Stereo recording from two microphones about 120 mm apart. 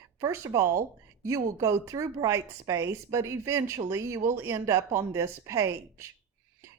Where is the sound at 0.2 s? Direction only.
25° right (ahead or behind).